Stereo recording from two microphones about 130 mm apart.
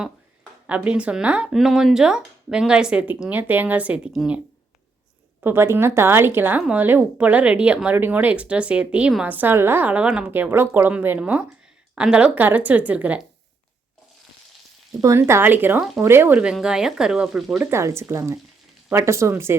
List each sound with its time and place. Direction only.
0.7 s speech: 10° right (ahead or behind)
5.4 s speech: 20° right (ahead or behind)
15.0 s speech: 20° right (ahead or behind)
16.4 s speech: 5° right (ahead or behind)
17.7 s speech: 20° right (ahead or behind)